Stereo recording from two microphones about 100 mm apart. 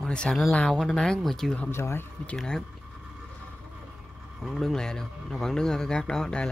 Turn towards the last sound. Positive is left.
turn(degrees=5)  # may be behind; listen again after turning